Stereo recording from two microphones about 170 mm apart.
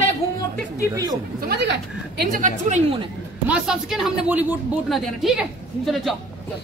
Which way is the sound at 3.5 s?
5° right (ahead or behind).